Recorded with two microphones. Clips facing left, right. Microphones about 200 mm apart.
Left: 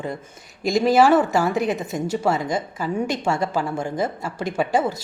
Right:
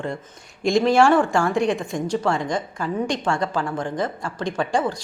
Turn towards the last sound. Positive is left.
turn(degrees=5)  # may be behind; listen again after turning